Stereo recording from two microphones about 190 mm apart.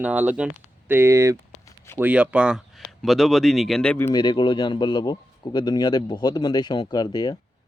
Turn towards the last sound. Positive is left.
turn(degrees=20)  # may be behind; listen again after turning